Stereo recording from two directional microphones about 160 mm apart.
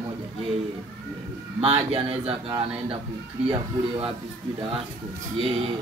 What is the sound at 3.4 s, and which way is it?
Speech, 35° right (ahead or behind).